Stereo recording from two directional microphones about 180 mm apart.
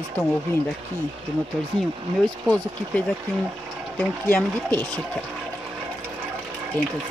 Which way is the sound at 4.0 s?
10° left (ahead or behind).